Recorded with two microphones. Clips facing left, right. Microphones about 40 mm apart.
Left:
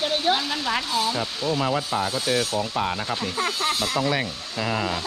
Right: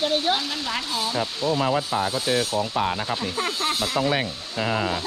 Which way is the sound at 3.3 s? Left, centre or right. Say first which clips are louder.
Left 2 dB; left.